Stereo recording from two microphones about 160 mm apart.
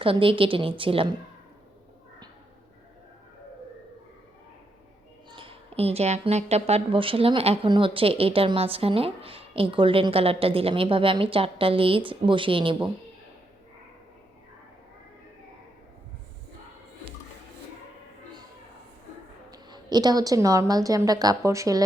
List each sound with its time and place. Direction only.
0.0 s a woman's voice: 35° right (ahead or behind)
5.3 s a woman's voice: 35° right (ahead or behind)
19.5 s a woman's voice: 25° right (ahead or behind)